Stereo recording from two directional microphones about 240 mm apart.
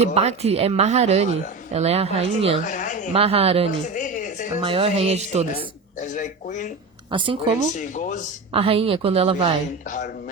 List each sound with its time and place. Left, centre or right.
0.0 s a woman's voice: right
2.6 s a sound: left
3.1 s a woman's voice: right
3.9 s a sound: left
4.6 s a woman's voice: right
6.1 s speech: left
7.1 s a woman's voice: right
7.8 s speech: left
8.5 s a woman's voice: right
9.8 s speech: left